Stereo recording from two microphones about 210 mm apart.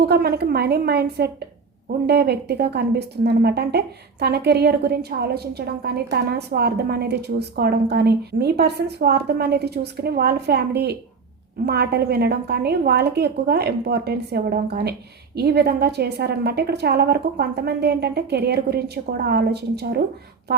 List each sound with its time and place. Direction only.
0.0 s speech: 50° right (ahead or behind)